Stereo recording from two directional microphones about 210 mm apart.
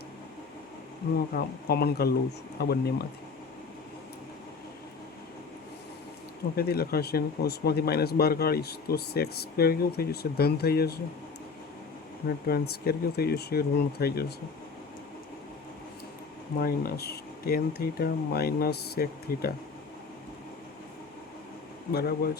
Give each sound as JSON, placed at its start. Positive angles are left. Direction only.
{"t": 1.0, "sound": "speech", "side_deg": 50}
{"t": 6.6, "sound": "speech", "side_deg": 45}
{"t": 12.5, "sound": "speech", "side_deg": 50}
{"t": 16.6, "sound": "speech", "side_deg": 45}
{"t": 21.9, "sound": "speech", "side_deg": 50}